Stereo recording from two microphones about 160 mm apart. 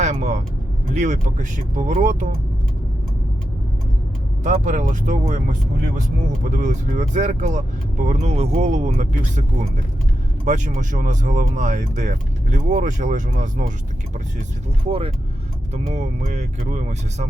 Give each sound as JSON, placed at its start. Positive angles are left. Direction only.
{"t": 0.0, "sound": "vehicle", "side_deg": -45}
{"t": 0.9, "sound": "speech", "side_deg": -50}
{"t": 4.4, "sound": "speech", "side_deg": -50}
{"t": 14.8, "sound": "speech", "side_deg": -35}